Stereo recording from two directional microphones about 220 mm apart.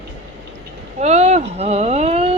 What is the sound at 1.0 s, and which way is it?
Speech, 30° right (ahead or behind).